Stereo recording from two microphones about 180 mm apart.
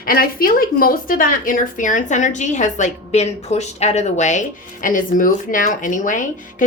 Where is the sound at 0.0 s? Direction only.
55° left (ahead or behind).